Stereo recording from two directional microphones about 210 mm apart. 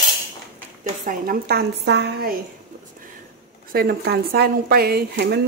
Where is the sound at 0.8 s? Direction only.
40° right (ahead or behind).